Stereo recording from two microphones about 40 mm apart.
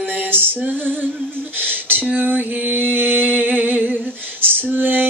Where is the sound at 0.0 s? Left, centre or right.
Right.